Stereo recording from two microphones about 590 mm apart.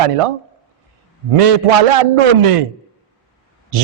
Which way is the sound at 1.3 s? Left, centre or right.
Right.